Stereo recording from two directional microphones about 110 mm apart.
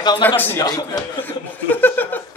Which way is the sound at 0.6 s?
35° left (ahead or behind).